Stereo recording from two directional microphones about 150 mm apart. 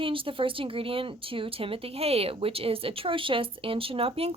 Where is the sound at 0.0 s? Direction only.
35° right (ahead or behind).